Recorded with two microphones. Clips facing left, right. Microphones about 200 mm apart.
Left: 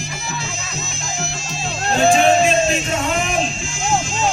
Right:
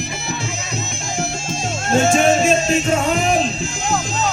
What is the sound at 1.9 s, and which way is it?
Music, 45° right (ahead or behind).